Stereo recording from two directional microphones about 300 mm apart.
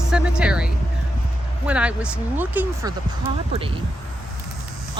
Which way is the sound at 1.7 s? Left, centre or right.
Centre.